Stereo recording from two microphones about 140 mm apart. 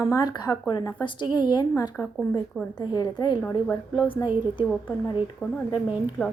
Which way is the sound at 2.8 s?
30° left (ahead or behind).